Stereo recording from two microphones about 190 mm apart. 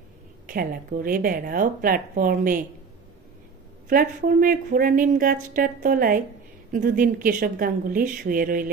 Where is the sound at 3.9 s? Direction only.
50° right (ahead or behind).